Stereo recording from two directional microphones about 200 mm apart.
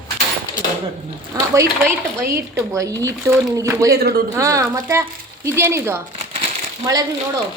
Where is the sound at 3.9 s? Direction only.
50° right (ahead or behind).